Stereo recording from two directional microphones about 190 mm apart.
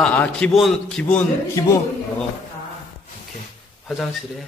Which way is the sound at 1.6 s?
15° left (ahead or behind).